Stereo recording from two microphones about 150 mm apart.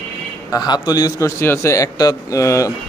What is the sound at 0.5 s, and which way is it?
A man's voice, 25° left (ahead or behind).